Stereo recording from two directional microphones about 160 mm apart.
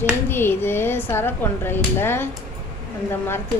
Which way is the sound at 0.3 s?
15° left (ahead or behind).